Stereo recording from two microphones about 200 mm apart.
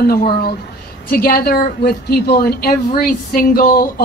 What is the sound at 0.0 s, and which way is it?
A woman's voice, 50° left (ahead or behind).